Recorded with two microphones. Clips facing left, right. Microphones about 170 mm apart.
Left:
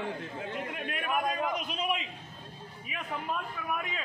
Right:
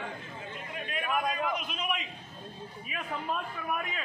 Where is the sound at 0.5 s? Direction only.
60° left (ahead or behind).